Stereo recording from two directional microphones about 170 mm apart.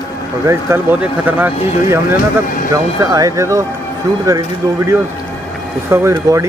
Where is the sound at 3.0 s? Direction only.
20° right (ahead or behind).